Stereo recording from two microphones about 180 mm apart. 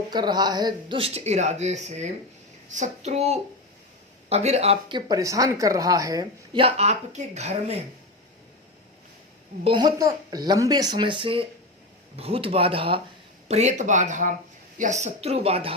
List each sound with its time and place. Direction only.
0.1 s speech: 25° right (ahead or behind)
6.6 s speech: 35° right (ahead or behind)
9.6 s speech: 25° right (ahead or behind)